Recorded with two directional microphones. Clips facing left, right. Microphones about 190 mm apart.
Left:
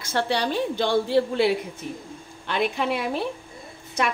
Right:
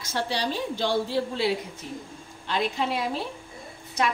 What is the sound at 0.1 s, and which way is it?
A woman's voice, 60° left (ahead or behind).